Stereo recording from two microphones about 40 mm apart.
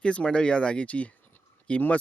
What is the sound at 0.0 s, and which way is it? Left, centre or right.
Speech, left.